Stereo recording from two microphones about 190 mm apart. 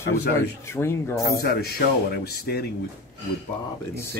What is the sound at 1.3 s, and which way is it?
Speech, 55° left (ahead or behind).